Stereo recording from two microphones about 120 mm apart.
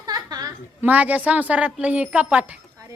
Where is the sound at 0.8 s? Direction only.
15° right (ahead or behind).